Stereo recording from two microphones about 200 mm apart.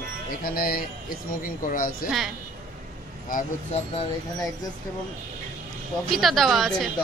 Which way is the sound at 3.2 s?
40° left (ahead or behind).